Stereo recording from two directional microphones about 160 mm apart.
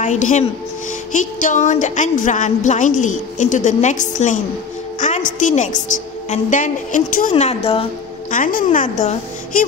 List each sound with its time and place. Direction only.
0.0 s a woman's voice: 50° left (ahead or behind)
8.3 s a woman's voice: 60° left (ahead or behind)